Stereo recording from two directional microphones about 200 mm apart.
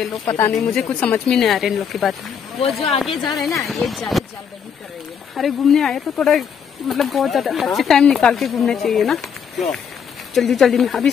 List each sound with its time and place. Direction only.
0.0 s speech: 5° left (ahead or behind)
5.3 s speech: centre (ahead or behind)